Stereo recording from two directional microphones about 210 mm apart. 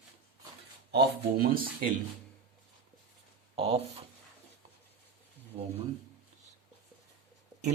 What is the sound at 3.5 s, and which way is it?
Speech, 25° right (ahead or behind).